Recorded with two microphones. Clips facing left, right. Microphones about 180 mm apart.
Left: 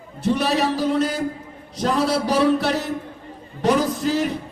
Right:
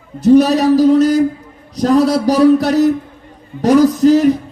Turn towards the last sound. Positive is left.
turn(degrees=-40)  # may be behind; listen again after turning